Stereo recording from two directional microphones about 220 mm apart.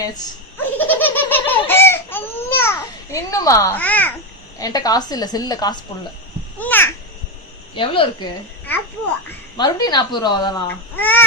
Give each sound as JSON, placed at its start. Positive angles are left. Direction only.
{"t": 0.8, "sound": "laughter", "side_deg": 10}
{"t": 4.5, "sound": "a woman's voice", "side_deg": 15}
{"t": 7.8, "sound": "speech", "side_deg": 20}
{"t": 9.6, "sound": "speech", "side_deg": 20}